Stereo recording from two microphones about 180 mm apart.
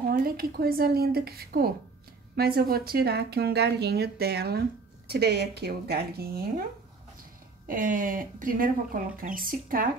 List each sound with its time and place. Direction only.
0.1 s a woman's voice: 55° right (ahead or behind)
7.6 s speech: 45° right (ahead or behind)